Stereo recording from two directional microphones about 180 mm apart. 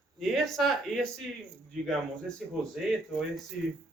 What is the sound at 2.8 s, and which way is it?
Speech, centre (ahead or behind).